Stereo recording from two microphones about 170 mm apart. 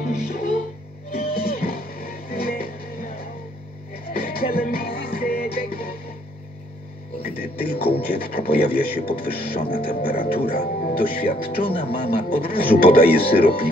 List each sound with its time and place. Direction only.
0.0 s music: 60° left (ahead or behind)
7.2 s speech: 65° left (ahead or behind)